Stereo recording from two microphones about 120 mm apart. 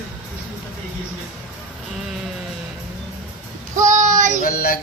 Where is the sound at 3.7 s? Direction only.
90° right.